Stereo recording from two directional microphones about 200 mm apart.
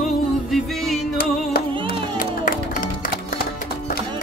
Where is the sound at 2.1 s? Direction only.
45° left (ahead or behind).